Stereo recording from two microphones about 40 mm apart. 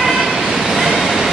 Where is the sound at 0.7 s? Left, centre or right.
Centre.